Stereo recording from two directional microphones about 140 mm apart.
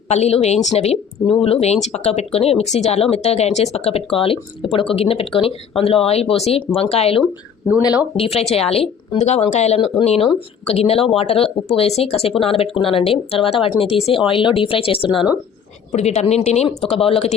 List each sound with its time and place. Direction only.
0.1 s speech: 50° left (ahead or behind)
7.8 s speech: 30° left (ahead or behind)
8.1 s speech: 45° left (ahead or behind)
15.9 s speech: 55° left (ahead or behind)